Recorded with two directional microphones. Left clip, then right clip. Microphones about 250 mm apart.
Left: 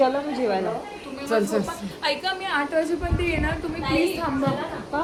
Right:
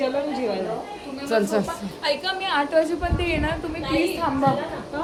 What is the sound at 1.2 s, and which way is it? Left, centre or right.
A woman's voice, centre.